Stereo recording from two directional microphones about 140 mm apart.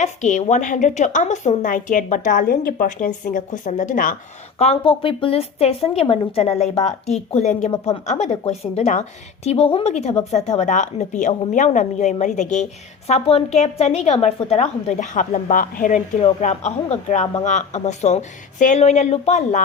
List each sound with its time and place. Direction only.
0.0 s a woman's voice: 55° left (ahead or behind)
4.5 s a woman's voice: 45° left (ahead or behind)